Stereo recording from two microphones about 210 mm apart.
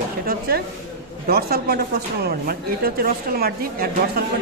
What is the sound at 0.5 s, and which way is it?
Speech, 45° right (ahead or behind).